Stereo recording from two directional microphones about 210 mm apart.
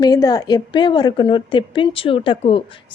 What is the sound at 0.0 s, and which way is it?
A woman's voice, 20° left (ahead or behind).